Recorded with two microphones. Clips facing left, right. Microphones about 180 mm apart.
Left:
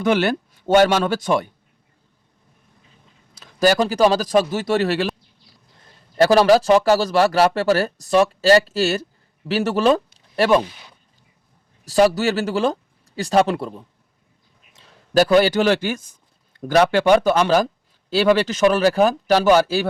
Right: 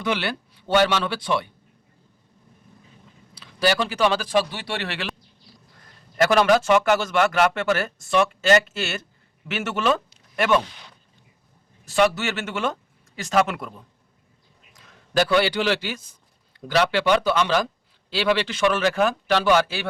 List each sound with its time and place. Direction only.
0.0 s speech: 45° left (ahead or behind)
3.3 s speech: 45° left (ahead or behind)
6.1 s speech: 35° left (ahead or behind)
10.2 s a sound: 35° left (ahead or behind)
11.9 s speech: 35° left (ahead or behind)
14.7 s a sound: 30° left (ahead or behind)
15.1 s speech: 40° left (ahead or behind)